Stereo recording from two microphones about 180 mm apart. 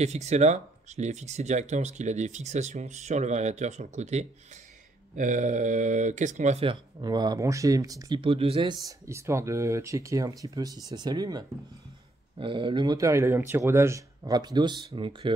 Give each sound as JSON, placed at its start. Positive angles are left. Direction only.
{"t": 0.0, "sound": "speech", "side_deg": -40}